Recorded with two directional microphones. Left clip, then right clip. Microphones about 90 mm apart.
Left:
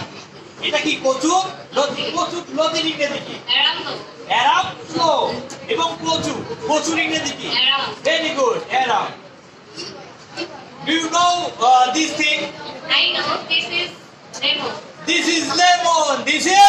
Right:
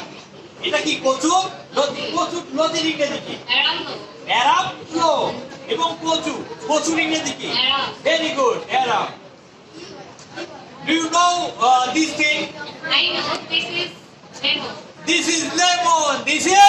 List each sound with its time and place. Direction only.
0.6 s a man's voice: 35° left (ahead or behind)
10.9 s a man's voice: 25° left (ahead or behind)
11.6 s a man's voice: 20° left (ahead or behind)
14.4 s a man's voice: 25° left (ahead or behind)